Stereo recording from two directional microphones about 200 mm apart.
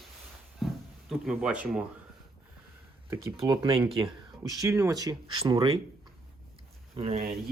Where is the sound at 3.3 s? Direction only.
25° right (ahead or behind).